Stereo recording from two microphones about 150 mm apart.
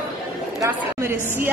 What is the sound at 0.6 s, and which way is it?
Speech, 15° right (ahead or behind).